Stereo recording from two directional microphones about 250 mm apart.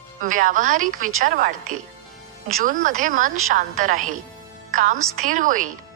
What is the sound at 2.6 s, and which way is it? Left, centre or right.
A woman's voice, right.